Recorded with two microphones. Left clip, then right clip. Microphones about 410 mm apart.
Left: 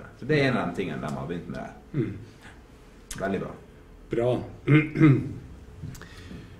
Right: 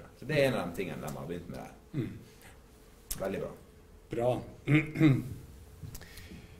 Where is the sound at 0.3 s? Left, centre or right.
Centre.